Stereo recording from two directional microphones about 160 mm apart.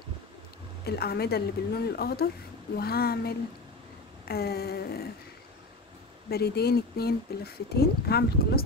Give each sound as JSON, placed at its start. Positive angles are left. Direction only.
{"t": 0.8, "sound": "speech", "side_deg": 85}
{"t": 2.7, "sound": "a sound", "side_deg": 80}
{"t": 6.3, "sound": "speech", "side_deg": 80}